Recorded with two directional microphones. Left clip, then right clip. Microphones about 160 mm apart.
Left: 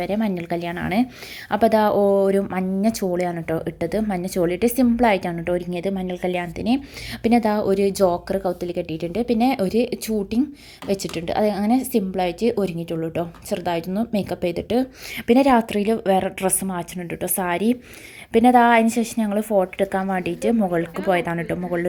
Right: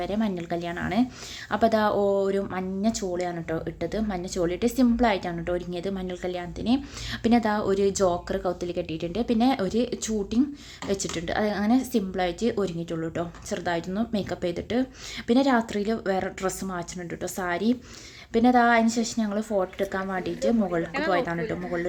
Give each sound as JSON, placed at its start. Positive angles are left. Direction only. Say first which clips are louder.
{"t": 0.0, "sound": "a woman's voice", "louder": "left 5 dB", "side_deg": 30}